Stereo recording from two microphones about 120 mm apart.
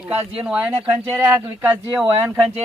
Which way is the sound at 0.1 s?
10° right (ahead or behind).